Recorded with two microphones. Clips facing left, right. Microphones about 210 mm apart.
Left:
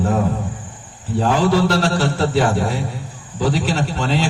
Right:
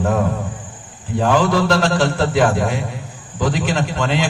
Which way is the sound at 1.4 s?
35° left (ahead or behind).